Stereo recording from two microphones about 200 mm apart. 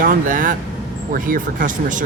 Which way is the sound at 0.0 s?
45° right (ahead or behind).